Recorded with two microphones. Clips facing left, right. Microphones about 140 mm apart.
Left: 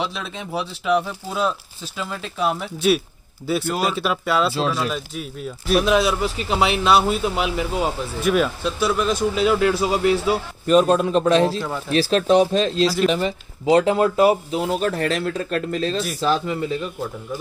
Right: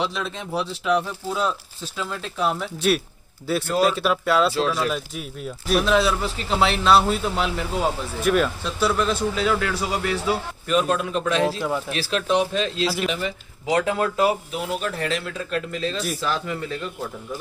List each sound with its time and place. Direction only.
0.0 s speech: 5° left (ahead or behind)
5.9 s speech: 10° left (ahead or behind)
10.7 s speech: 35° left (ahead or behind)
14.7 s speech: 45° left (ahead or behind)
16.2 s speech: 30° left (ahead or behind)
16.6 s speech: 15° left (ahead or behind)